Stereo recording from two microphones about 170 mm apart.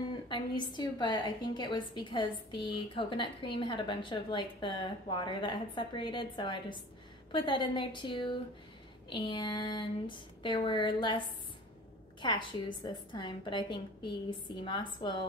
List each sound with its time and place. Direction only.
0.3 s a woman's voice: 25° left (ahead or behind)